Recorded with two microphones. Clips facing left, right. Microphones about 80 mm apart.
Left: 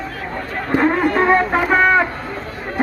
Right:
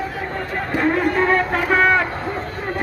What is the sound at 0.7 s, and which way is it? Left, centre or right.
Music, left.